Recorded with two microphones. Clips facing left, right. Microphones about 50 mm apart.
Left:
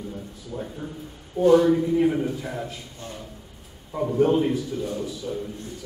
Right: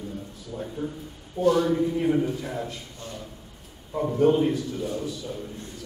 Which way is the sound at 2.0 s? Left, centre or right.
Centre.